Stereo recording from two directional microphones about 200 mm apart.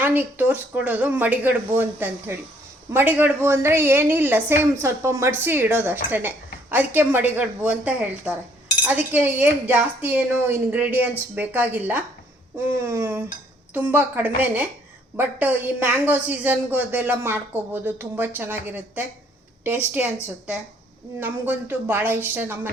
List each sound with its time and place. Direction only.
0.0 s a woman's voice: 10° right (ahead or behind)
21.2 s a woman's voice: 10° right (ahead or behind)